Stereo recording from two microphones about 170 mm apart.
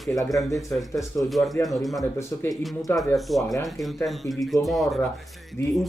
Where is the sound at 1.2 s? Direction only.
Centre (ahead or behind).